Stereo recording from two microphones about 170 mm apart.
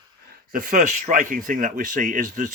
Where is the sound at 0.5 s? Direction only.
50° right (ahead or behind).